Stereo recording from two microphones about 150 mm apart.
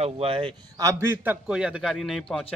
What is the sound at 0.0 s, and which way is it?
Speech, 40° right (ahead or behind).